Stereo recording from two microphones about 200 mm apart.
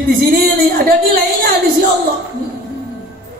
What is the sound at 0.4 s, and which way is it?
A man's voice, 45° right (ahead or behind).